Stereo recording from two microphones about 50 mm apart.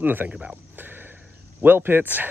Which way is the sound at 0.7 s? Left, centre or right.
Right.